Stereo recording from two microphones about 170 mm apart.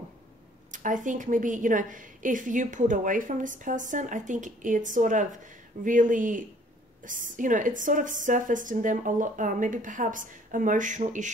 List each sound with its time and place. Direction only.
0.7 s a woman's voice: 50° right (ahead or behind)